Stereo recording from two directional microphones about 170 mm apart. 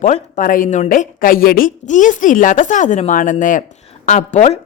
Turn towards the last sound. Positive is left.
turn(degrees=45)  # may be behind; listen again after turning